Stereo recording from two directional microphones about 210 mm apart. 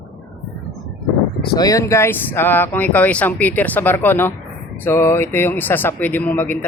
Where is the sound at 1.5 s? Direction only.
15° left (ahead or behind).